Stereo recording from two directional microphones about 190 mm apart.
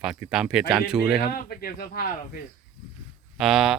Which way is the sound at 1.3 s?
50° left (ahead or behind).